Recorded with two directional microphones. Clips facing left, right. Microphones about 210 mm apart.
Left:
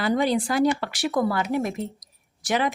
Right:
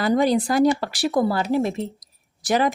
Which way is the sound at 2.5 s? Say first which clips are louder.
Right 4 dB; 40° right (ahead or behind).